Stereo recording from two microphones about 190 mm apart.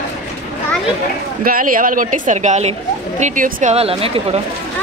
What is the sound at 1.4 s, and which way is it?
A woman's voice, 45° right (ahead or behind).